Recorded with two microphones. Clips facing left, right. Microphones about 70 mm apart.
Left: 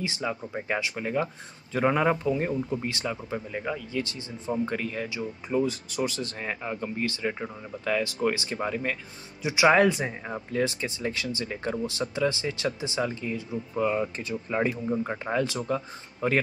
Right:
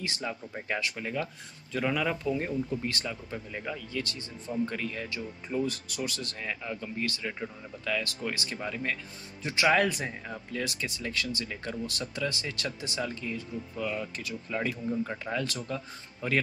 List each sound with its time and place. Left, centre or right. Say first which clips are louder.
0.0 s speech: left 5 dB; left
9.4 s a man's voice: left 5 dB; centre
9.7 s speech: left 5 dB; left